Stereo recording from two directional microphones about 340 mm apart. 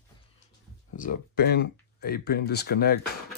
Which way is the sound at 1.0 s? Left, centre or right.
Left.